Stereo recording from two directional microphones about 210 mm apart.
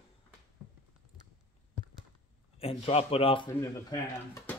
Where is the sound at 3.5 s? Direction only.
15° left (ahead or behind).